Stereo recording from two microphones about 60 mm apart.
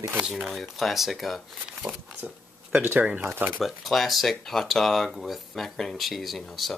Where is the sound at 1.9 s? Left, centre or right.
Right.